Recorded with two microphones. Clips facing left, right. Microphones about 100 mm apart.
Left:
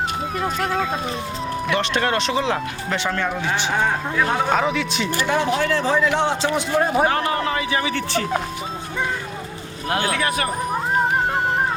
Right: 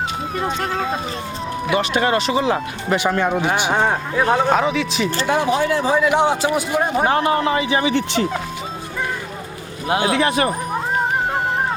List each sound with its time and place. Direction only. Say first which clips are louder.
0.3 s a man's voice: even; centre (ahead or behind); by 3.4 s 15° right (ahead or behind)
3.8 s speech: right 3 dB; 30° right (ahead or behind)
4.4 s a man's voice: right 3 dB; centre (ahead or behind)
5.2 s a man's voice: right 2 dB; 15° right (ahead or behind)
10.0 s speech: right 5 dB; 25° right (ahead or behind)